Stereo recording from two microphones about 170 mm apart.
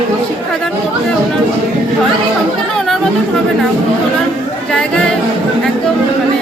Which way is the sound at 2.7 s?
Centre (ahead or behind).